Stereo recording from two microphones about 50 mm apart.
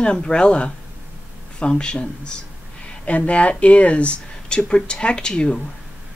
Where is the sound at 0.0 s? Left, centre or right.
Centre.